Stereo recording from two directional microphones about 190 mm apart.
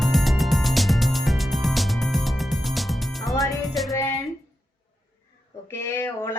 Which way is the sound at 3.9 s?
15° left (ahead or behind).